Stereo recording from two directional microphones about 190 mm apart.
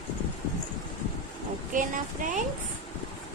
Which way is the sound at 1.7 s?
45° right (ahead or behind).